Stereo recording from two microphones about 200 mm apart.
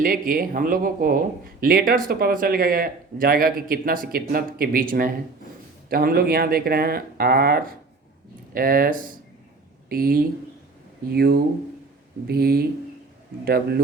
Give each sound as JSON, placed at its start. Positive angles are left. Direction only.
{"t": 0.0, "sound": "speech", "side_deg": -45}